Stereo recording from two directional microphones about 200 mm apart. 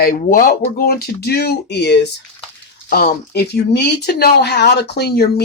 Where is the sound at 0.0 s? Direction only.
45° left (ahead or behind).